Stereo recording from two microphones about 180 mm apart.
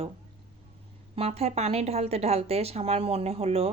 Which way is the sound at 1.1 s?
35° right (ahead or behind).